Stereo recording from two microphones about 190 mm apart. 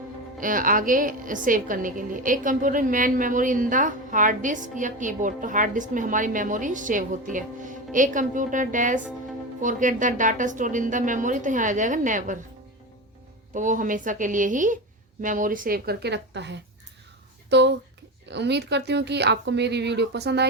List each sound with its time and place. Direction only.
0.3 s a woman's voice: 45° right (ahead or behind)
13.5 s a woman's voice: 40° right (ahead or behind); by 20.5 s 60° right (ahead or behind)